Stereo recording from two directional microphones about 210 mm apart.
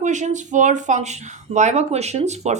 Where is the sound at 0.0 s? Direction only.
35° right (ahead or behind).